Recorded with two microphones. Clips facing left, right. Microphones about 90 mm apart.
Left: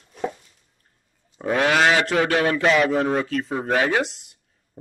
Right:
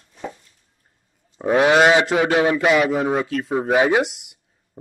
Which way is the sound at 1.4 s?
20° right (ahead or behind).